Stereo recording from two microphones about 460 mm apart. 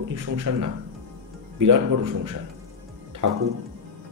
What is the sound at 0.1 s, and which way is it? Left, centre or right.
Speech, right.